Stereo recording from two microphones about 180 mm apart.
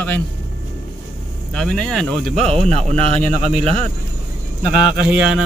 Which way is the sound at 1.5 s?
5° left (ahead or behind).